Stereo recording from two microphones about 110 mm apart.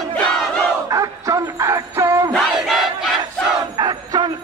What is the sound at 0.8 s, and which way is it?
Music, 30° right (ahead or behind).